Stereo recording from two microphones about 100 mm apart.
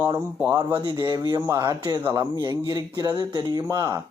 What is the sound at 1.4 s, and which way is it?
Speech, 35° right (ahead or behind).